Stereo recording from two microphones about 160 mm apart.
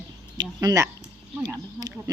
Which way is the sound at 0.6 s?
20° right (ahead or behind).